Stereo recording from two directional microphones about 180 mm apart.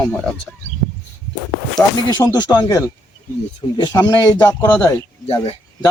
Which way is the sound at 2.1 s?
20° left (ahead or behind).